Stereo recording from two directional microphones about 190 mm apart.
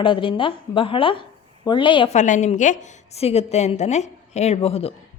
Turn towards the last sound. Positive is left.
turn(degrees=30)  # may be behind; listen again after turning